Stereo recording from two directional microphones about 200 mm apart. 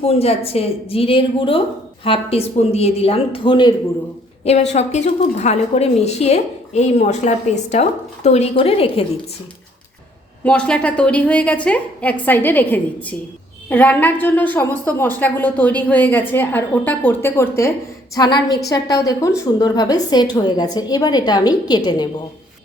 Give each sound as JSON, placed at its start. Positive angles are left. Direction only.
{"t": 0.0, "sound": "a woman's voice", "side_deg": 30}
{"t": 4.4, "sound": "a woman's voice", "side_deg": 35}
{"t": 10.4, "sound": "a woman's voice", "side_deg": 5}